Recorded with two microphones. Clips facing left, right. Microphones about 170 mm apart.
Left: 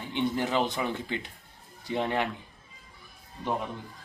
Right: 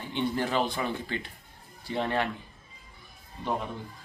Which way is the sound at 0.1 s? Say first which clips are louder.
Left 1 dB; 15° left (ahead or behind).